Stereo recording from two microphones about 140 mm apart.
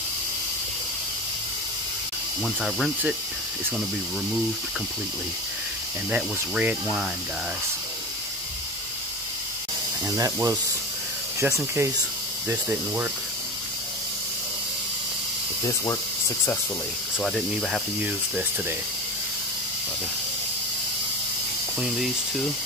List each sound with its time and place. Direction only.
2.4 s speech: centre (ahead or behind)
6.0 s speech: 10° right (ahead or behind)
10.0 s speech: 25° right (ahead or behind)
15.6 s speech: 25° left (ahead or behind)
17.2 s speech: centre (ahead or behind)
18.0 s speech: 10° right (ahead or behind)
21.7 s speech: centre (ahead or behind)